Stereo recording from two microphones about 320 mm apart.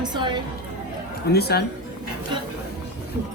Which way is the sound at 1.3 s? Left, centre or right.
Left.